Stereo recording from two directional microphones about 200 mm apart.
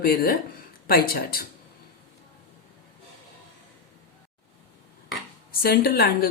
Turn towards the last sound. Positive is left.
turn(degrees=50)  # may be behind; listen again after turning